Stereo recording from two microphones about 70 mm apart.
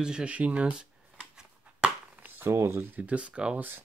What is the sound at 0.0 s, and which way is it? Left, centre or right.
Speech, centre.